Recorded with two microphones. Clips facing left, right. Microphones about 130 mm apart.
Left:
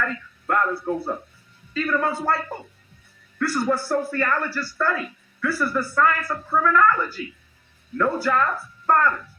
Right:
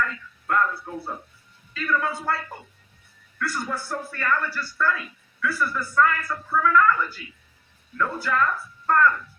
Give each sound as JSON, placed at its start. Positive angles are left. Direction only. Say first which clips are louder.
{"t": 0.0, "sound": "speech", "louder": "left 1 dB", "side_deg": 40}